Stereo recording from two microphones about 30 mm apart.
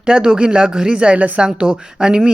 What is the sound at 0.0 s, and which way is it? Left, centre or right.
Speech, right.